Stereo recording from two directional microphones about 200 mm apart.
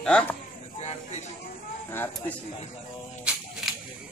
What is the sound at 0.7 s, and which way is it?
Speech, 30° left (ahead or behind).